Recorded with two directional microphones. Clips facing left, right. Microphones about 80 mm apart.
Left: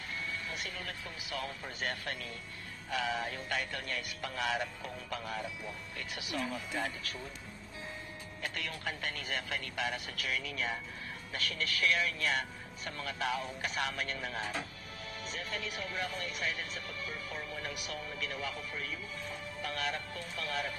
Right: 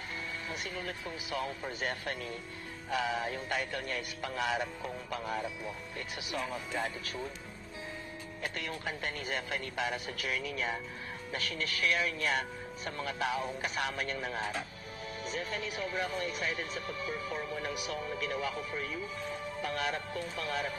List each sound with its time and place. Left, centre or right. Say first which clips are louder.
0.5 s speech: right 3 dB; right
8.4 s speech: right 2 dB; right